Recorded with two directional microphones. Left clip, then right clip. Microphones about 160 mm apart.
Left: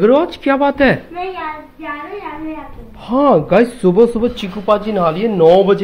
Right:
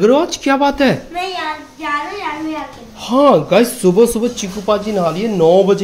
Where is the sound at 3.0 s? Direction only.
10° right (ahead or behind).